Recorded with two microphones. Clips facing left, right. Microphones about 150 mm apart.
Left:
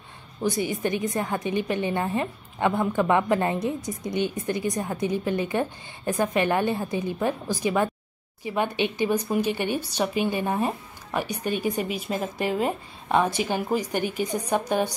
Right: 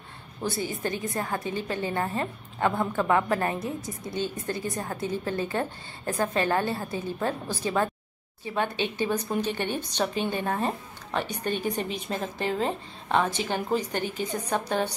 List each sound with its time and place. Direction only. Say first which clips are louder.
0.4 s a woman's voice: left 4 dB; 15° left (ahead or behind)